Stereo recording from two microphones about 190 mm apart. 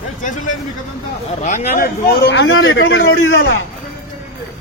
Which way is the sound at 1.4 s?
45° left (ahead or behind).